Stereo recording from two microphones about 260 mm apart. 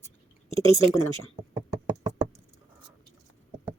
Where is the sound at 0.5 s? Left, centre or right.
Centre.